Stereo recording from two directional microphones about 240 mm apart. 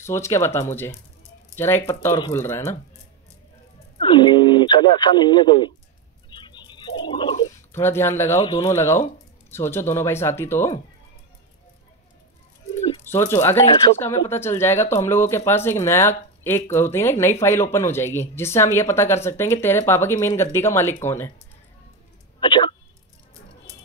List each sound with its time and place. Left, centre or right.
0.0 s speech: centre
4.0 s speech: centre
6.3 s a sound: centre
7.7 s speech: centre
8.4 s speech: left
8.7 s speech: centre
13.0 s speech: centre
22.4 s a sound: centre